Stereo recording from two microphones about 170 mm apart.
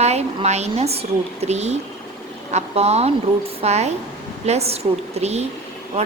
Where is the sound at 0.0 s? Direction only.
40° right (ahead or behind).